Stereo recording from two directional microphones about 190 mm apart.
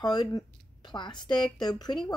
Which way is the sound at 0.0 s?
20° left (ahead or behind).